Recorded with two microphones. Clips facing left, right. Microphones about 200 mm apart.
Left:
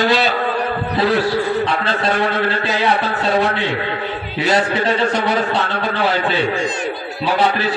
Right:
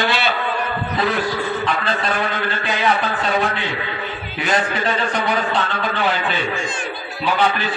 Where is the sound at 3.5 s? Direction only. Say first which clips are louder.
Left 4 dB; 65° left (ahead or behind).